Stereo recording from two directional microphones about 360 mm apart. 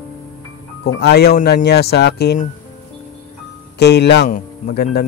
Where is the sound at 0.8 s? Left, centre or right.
Left.